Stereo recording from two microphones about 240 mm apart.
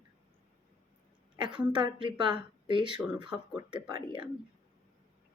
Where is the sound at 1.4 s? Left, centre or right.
Centre.